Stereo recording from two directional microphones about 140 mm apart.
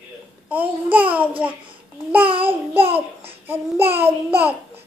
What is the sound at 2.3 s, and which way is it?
Child singing, 40° right (ahead or behind).